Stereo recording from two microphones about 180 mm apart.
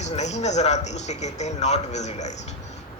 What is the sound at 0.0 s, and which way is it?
A man's voice, 40° left (ahead or behind).